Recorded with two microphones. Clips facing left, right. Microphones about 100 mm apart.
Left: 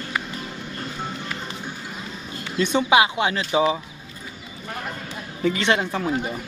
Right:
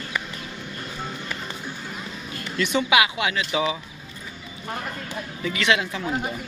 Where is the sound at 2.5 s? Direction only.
30° left (ahead or behind).